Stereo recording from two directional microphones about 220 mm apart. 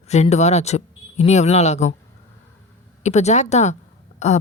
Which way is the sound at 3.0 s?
30° left (ahead or behind).